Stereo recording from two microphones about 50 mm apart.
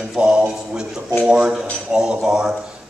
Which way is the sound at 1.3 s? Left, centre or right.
Centre.